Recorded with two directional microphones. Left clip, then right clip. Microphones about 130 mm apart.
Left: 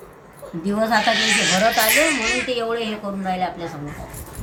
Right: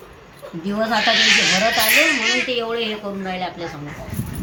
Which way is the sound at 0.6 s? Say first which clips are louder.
Even; 5° right (ahead or behind).